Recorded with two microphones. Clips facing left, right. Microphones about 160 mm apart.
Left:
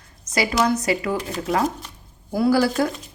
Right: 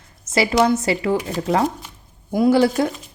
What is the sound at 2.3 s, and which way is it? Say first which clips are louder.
Speech: right 3 dB; 20° right (ahead or behind).